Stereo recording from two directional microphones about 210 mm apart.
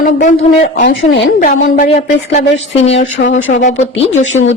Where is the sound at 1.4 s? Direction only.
40° left (ahead or behind).